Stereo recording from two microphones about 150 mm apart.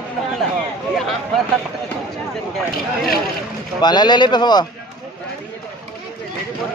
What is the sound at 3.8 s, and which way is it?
Speech, 30° left (ahead or behind).